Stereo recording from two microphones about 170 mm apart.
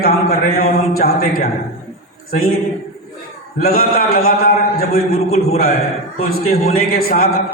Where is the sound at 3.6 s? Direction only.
60° left (ahead or behind).